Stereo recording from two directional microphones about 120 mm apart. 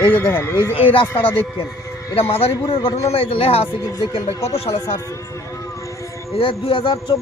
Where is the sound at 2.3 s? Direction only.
50° left (ahead or behind).